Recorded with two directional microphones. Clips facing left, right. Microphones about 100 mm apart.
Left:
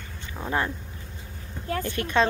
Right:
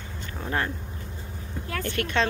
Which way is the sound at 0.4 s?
15° left (ahead or behind).